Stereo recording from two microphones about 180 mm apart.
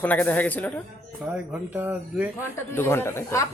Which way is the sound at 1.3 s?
5° right (ahead or behind).